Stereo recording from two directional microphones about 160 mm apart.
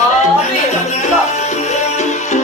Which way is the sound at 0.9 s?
45° left (ahead or behind).